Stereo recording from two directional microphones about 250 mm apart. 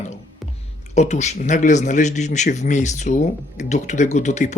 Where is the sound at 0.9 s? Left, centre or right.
Left.